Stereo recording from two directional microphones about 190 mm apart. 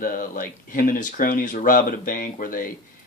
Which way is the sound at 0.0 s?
45° left (ahead or behind).